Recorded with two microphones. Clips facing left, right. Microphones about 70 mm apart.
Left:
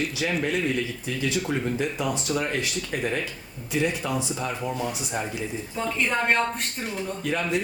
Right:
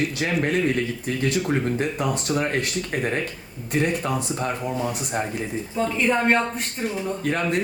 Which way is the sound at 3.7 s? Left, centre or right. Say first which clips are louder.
Right 2 dB; right.